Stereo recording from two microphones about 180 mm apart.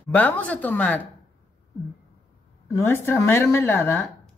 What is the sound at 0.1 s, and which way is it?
Speech, 10° left (ahead or behind).